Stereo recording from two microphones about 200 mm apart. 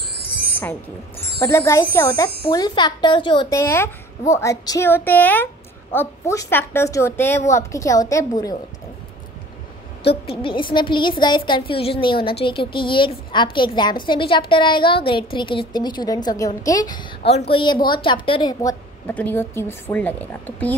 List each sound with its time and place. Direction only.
1.4 s speech: 10° left (ahead or behind)
10.2 s a woman's voice: 25° left (ahead or behind); by 20.7 s 10° left (ahead or behind)